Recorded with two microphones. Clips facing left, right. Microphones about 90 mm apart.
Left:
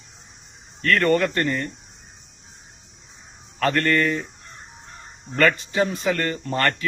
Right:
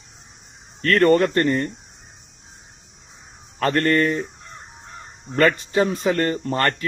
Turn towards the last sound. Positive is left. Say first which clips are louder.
# right 2 dB
turn(degrees=-35)  # may be behind; listen again after turning